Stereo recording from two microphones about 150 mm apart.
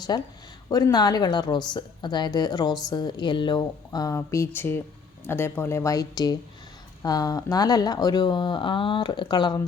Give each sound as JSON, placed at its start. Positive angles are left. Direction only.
{"t": 0.1, "sound": "a woman's voice", "side_deg": 25}